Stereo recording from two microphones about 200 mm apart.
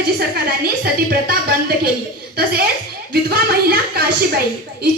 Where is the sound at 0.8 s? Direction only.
50° right (ahead or behind).